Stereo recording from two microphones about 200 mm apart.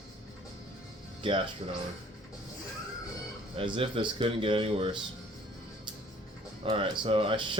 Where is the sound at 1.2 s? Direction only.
25° right (ahead or behind).